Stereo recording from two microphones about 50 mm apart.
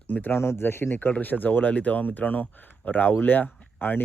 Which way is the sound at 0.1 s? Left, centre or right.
Left.